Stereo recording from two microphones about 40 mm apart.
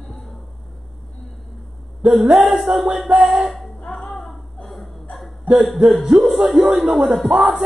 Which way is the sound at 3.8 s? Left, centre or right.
Centre.